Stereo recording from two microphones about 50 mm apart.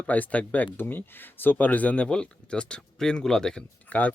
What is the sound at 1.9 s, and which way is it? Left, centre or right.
Speech, centre.